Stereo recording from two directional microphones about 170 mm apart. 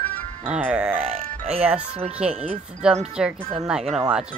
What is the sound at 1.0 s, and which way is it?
Music, 35° right (ahead or behind).